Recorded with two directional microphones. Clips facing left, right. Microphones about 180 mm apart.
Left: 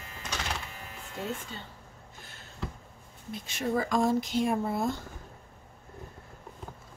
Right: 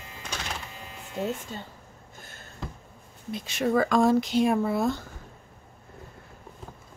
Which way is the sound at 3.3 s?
80° right.